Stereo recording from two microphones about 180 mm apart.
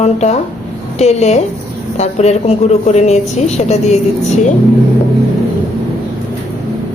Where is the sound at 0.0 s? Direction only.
40° left (ahead or behind).